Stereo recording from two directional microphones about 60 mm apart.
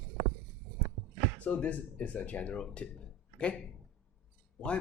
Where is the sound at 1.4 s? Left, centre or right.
Left.